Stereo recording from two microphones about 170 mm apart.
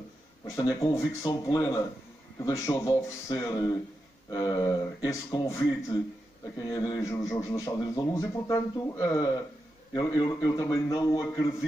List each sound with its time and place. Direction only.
0.6 s speech: 20° left (ahead or behind)